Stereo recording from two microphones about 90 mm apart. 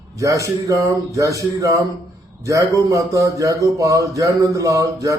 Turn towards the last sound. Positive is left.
turn(degrees=-35)  # may be behind; listen again after turning